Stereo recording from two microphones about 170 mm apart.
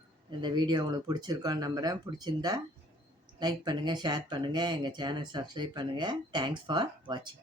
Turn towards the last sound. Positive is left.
turn(degrees=-25)  # may be behind; listen again after turning